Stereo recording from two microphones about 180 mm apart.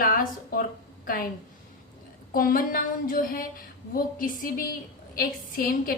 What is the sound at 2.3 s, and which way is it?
A woman's voice, 50° left (ahead or behind).